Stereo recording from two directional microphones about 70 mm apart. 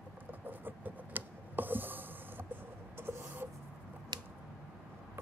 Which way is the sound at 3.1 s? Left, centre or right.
Right.